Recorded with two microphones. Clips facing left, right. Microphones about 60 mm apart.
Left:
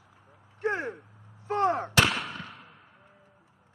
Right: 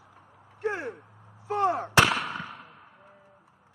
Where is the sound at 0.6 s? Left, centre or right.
Centre.